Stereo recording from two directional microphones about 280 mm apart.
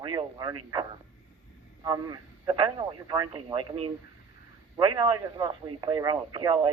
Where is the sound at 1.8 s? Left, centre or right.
Centre.